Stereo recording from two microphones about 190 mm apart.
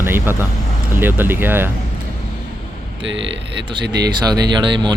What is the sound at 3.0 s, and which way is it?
Speech, 75° right (ahead or behind).